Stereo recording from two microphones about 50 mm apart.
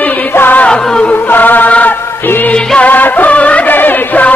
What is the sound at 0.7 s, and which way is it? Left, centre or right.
Music, centre.